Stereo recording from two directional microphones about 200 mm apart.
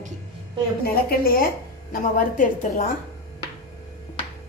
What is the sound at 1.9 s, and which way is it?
Speech, 40° left (ahead or behind).